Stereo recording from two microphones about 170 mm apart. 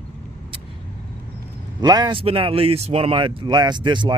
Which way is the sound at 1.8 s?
25° right (ahead or behind).